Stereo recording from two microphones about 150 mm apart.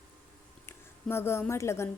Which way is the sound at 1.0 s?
15° left (ahead or behind).